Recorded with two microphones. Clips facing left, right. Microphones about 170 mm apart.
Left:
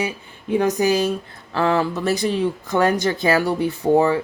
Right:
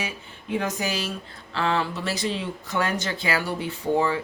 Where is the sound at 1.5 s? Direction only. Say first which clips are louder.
Left 6 dB; 45° left (ahead or behind).